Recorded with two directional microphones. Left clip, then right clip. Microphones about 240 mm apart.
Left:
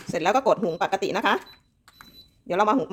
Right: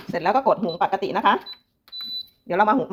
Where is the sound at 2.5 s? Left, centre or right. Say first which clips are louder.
Right 2 dB; centre.